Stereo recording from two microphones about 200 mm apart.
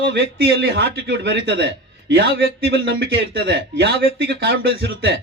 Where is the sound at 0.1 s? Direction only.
50° right (ahead or behind).